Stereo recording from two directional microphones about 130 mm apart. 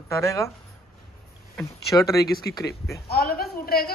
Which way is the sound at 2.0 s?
25° left (ahead or behind).